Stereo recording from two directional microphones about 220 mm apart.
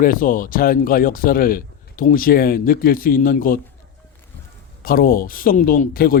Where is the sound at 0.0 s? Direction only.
40° left (ahead or behind).